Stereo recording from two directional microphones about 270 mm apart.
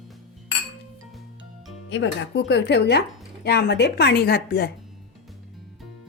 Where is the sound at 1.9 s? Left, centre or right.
Left.